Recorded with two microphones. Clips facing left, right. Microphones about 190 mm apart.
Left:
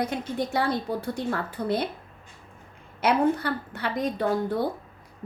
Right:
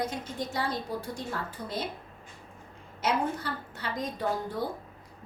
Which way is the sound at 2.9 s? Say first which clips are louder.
Left 7 dB; 65° left (ahead or behind).